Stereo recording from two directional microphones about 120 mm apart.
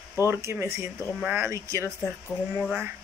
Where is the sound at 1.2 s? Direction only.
15° right (ahead or behind).